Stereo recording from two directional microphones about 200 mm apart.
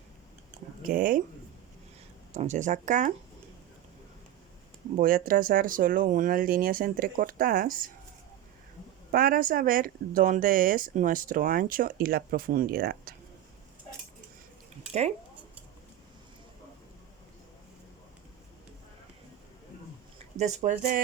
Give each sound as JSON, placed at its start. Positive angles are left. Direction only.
{"t": 0.9, "sound": "speech", "side_deg": -45}
{"t": 2.3, "sound": "speech", "side_deg": -35}
{"t": 4.9, "sound": "speech", "side_deg": -45}
{"t": 9.1, "sound": "speech", "side_deg": -45}
{"t": 20.4, "sound": "speech", "side_deg": -35}